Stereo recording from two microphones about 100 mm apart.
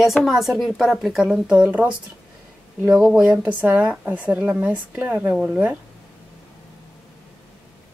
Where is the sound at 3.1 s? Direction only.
10° right (ahead or behind).